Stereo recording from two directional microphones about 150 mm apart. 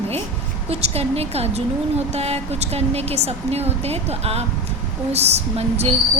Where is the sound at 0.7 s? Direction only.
45° right (ahead or behind).